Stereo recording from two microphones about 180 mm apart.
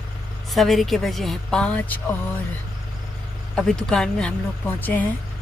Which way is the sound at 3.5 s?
5° left (ahead or behind).